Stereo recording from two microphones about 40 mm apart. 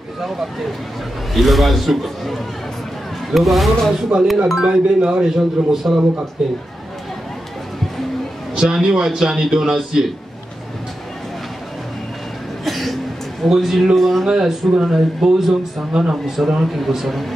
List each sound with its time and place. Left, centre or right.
1.3 s a man's voice: centre
4.1 s a man's voice: right
8.5 s speech: centre
12.6 s a sound: centre
13.5 s a man's voice: centre
14.2 s speech: centre
15.9 s a man's voice: right
16.3 s a man's voice: centre